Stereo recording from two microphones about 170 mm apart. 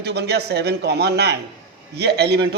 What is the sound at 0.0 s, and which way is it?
A man's voice, 75° right (ahead or behind).